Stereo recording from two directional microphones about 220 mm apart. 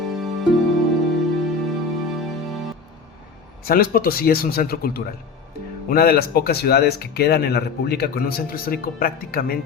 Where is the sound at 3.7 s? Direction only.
45° left (ahead or behind).